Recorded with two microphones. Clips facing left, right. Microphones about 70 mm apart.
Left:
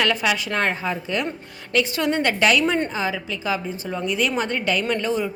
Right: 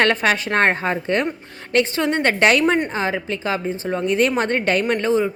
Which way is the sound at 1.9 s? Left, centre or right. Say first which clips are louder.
Right 2 dB; right.